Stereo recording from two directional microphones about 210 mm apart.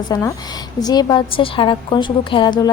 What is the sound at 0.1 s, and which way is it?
A woman's voice, 15° left (ahead or behind).